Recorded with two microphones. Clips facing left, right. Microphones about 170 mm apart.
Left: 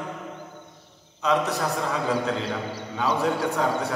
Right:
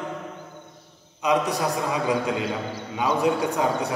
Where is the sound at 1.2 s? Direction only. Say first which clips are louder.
Right 1 dB; 15° right (ahead or behind).